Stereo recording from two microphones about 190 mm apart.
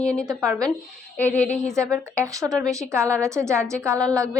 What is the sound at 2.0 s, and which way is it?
A woman's voice, 15° right (ahead or behind).